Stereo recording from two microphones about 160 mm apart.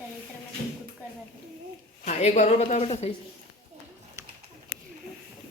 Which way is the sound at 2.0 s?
45° left (ahead or behind).